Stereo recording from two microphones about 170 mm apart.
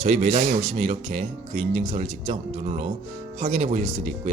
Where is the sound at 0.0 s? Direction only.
40° right (ahead or behind).